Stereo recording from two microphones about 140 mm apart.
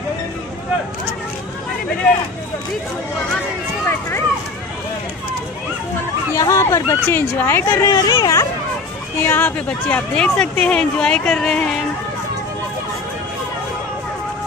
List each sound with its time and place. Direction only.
6.3 s speech: 20° left (ahead or behind)
9.2 s speech: 15° left (ahead or behind)